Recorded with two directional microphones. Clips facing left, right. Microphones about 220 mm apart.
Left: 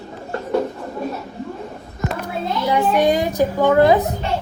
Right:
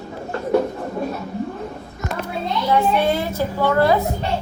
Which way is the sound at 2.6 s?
15° left (ahead or behind).